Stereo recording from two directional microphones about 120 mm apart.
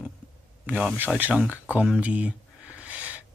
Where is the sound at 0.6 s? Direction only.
10° right (ahead or behind).